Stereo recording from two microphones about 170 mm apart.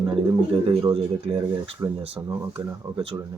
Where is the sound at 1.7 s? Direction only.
15° right (ahead or behind).